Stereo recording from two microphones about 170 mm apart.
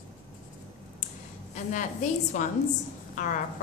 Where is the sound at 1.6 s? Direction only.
45° left (ahead or behind).